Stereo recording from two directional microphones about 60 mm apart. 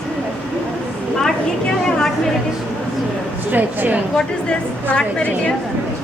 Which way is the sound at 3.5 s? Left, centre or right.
Right.